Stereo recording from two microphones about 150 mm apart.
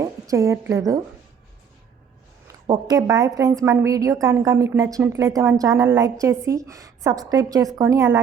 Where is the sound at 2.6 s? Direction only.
25° right (ahead or behind).